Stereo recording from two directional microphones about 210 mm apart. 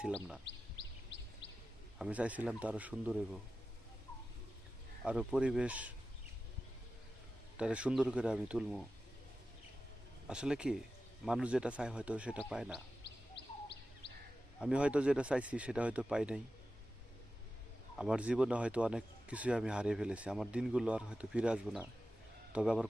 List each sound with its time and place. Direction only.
2.0 s speech: 5° right (ahead or behind)
5.0 s a man's voice: 5° right (ahead or behind)
7.5 s a man's voice: 5° right (ahead or behind)
10.2 s a man's voice: 5° right (ahead or behind)
13.1 s bird: 55° left (ahead or behind)
14.6 s a man's voice: 5° right (ahead or behind)
17.9 s a man's voice: 5° right (ahead or behind)